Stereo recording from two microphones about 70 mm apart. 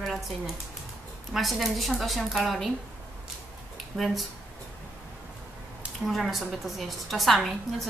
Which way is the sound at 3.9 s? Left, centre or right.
Centre.